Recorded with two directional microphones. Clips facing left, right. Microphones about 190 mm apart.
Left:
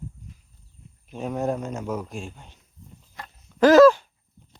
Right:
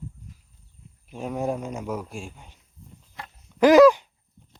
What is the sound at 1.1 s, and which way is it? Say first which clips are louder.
Speech: left 1 dB; 5° right (ahead or behind).